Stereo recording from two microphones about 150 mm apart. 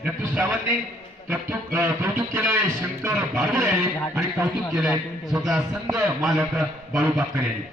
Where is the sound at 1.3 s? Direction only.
20° right (ahead or behind).